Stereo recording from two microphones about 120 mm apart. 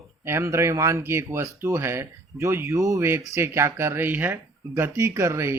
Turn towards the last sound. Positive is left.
turn(degrees=-25)  # may be behind; listen again after turning